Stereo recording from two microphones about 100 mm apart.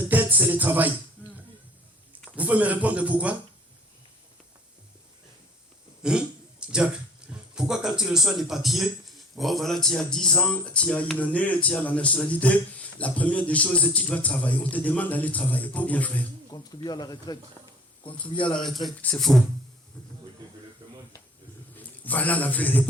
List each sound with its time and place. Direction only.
0.1 s music: 15° right (ahead or behind)
2.3 s speech: 15° right (ahead or behind)
6.0 s throat clearing: 10° right (ahead or behind)
7.5 s speech: 5° right (ahead or behind); by 16.2 s 15° left (ahead or behind)
16.5 s speech: 40° left (ahead or behind)
17.6 s a sound: 25° left (ahead or behind)
18.0 s speech: 55° left (ahead or behind)
19.0 s speech: 5° left (ahead or behind)
20.8 s a sound: 45° right (ahead or behind)
21.8 s a man's voice: 15° left (ahead or behind)